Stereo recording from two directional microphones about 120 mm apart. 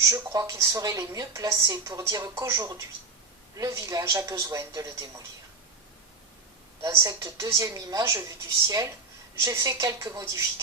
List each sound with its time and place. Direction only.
0.1 s a woman's voice: 25° right (ahead or behind)
6.8 s a woman's voice: 30° right (ahead or behind)